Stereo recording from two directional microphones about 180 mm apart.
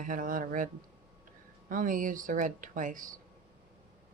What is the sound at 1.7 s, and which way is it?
Speech, 50° right (ahead or behind).